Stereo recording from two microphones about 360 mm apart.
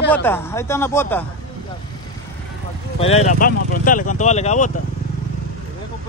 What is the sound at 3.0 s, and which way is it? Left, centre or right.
Speech, centre.